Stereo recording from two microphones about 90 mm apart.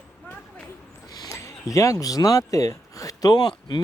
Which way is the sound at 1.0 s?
40° left (ahead or behind).